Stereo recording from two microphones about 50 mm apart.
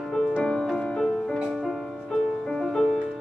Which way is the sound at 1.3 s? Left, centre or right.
Centre.